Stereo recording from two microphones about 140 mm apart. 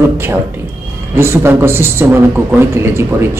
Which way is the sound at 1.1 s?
20° right (ahead or behind).